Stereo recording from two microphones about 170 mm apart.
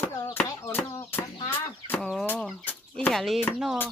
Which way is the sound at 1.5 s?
10° left (ahead or behind).